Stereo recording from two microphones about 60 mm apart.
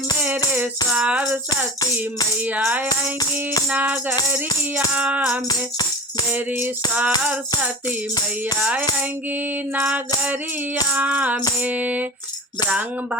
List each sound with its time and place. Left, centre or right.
0.2 s music: right
4.9 s music: right
9.7 s music: right